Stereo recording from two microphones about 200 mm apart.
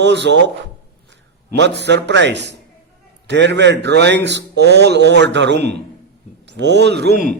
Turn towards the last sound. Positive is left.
turn(degrees=-50)  # may be behind; listen again after turning